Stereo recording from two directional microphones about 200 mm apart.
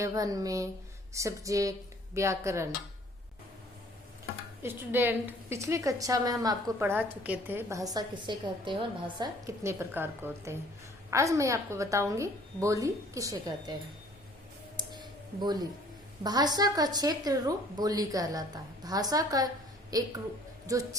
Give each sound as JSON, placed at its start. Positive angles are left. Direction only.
{"t": 0.0, "sound": "a woman's voice", "side_deg": -15}
{"t": 4.6, "sound": "a woman's voice", "side_deg": -10}
{"t": 14.8, "sound": "a sound", "side_deg": -20}
{"t": 16.2, "sound": "a woman's voice", "side_deg": -20}